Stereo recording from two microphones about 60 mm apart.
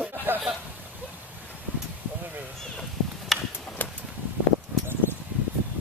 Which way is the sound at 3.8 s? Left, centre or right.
Left.